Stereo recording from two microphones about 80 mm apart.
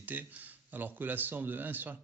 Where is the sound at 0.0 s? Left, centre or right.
Right.